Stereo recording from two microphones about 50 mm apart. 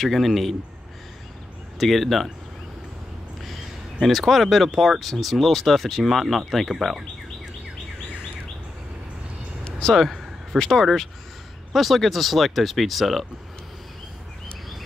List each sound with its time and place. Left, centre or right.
0.0 s speech: centre
1.8 s speech: centre
4.0 s speech: centre
9.7 s a sound: centre
9.9 s a man's voice: centre